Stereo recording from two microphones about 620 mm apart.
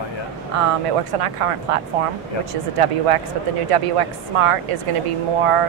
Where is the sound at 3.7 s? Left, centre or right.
Right.